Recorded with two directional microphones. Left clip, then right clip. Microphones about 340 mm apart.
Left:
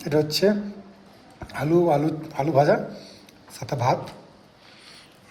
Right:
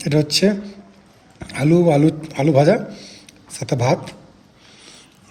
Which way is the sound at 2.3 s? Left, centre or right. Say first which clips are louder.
Right 3 dB; right.